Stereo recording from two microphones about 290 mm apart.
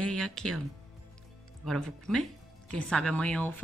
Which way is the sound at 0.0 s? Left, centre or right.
Centre.